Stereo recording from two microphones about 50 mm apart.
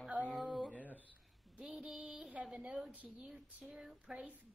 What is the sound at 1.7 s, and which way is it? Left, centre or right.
A woman's voice, right.